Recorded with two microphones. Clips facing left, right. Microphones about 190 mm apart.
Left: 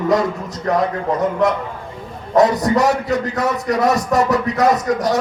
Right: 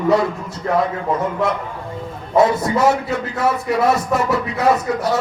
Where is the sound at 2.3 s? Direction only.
40° left (ahead or behind).